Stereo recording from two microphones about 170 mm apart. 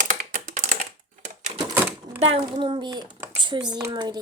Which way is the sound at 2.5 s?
30° right (ahead or behind).